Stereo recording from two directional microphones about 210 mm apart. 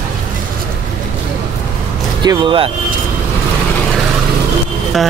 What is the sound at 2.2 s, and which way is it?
Speech, 20° right (ahead or behind).